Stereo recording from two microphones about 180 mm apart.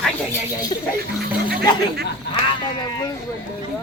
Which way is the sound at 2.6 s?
25° left (ahead or behind).